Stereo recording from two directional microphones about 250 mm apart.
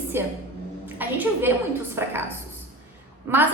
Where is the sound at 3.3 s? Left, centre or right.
Centre.